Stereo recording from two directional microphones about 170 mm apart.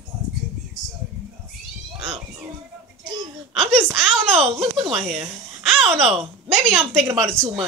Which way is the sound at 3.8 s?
Centre (ahead or behind).